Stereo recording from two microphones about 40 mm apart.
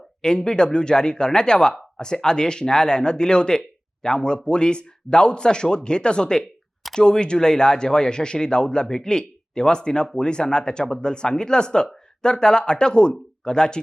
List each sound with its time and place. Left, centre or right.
0.2 s speech: centre